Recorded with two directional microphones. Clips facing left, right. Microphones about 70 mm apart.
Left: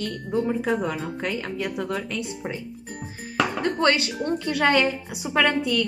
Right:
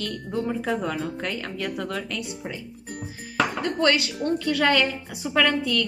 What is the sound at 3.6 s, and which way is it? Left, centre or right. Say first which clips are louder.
A woman's voice: left 1 dB; left.